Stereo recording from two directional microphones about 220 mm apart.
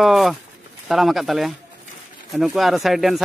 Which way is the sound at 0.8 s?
Centre (ahead or behind).